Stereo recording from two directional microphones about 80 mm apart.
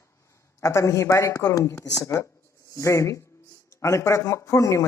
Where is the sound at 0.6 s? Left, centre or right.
Left.